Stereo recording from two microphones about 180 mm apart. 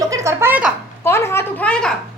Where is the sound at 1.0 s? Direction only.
15° left (ahead or behind).